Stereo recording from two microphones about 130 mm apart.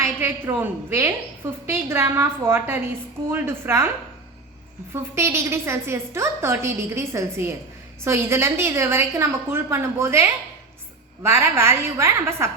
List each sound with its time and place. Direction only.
0.0 s a woman's voice: 20° right (ahead or behind)
5.1 s a woman's voice: 20° right (ahead or behind)